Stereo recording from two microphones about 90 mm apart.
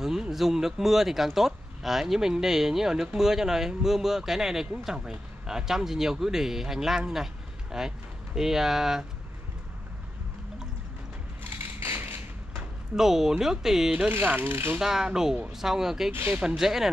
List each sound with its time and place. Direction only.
0.0 s speech: 5° right (ahead or behind)
11.5 s a sound: 25° right (ahead or behind)
12.9 s speech: 5° right (ahead or behind)
13.9 s speech: 20° right (ahead or behind)
14.8 s speech: 5° right (ahead or behind)
16.1 s speech: 20° right (ahead or behind)
16.3 s speech: 5° right (ahead or behind)